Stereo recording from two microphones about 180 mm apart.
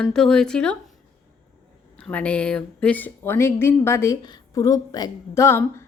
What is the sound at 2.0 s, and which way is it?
A woman's voice, 5° left (ahead or behind).